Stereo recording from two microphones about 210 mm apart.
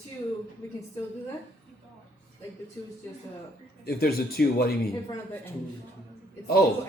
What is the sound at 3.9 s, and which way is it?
Speech, 45° left (ahead or behind).